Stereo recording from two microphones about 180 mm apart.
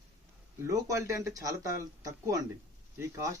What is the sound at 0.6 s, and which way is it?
A man's voice, 15° right (ahead or behind).